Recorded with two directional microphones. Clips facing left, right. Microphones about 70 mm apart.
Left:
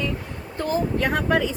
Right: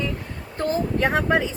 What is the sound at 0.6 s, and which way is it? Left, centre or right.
Speech, right.